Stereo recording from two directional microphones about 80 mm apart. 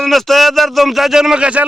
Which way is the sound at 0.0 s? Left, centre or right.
Centre.